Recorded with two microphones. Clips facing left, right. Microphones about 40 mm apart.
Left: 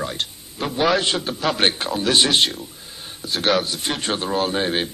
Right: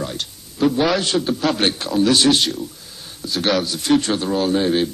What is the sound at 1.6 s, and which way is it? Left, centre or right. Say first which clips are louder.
Speech: right 3 dB; left.